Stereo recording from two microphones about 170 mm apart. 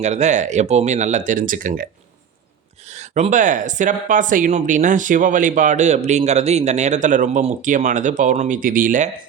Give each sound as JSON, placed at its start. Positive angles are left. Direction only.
{"t": 0.0, "sound": "speech", "side_deg": -40}
{"t": 2.8, "sound": "speech", "side_deg": -40}